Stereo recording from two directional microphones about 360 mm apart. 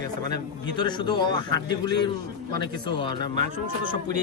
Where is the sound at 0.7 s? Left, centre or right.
Centre.